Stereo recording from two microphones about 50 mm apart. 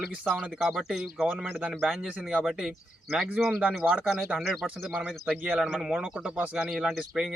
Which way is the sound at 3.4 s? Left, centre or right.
Centre.